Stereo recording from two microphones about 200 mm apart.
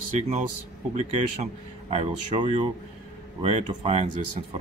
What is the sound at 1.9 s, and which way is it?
Speech, 35° right (ahead or behind).